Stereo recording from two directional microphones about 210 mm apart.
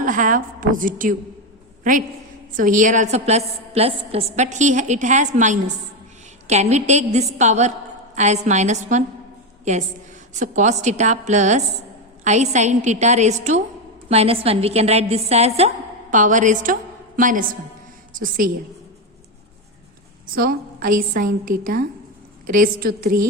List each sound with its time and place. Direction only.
0.0 s a woman's voice: 40° right (ahead or behind)
20.3 s a woman's voice: 45° right (ahead or behind)